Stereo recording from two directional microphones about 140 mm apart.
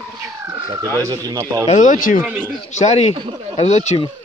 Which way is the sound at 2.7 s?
50° left (ahead or behind).